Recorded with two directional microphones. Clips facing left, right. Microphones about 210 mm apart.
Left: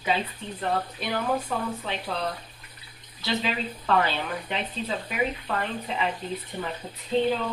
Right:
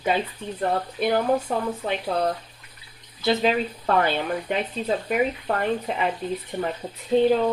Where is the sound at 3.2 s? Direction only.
45° right (ahead or behind).